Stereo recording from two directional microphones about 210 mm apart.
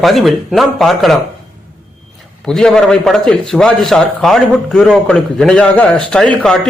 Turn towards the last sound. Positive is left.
turn(degrees=5)  # may be behind; listen again after turning